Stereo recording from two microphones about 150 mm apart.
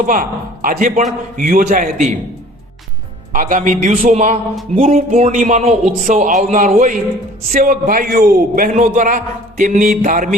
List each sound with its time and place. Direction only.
0.0 s a man's voice: 65° right (ahead or behind)
3.3 s a man's voice: 60° right (ahead or behind)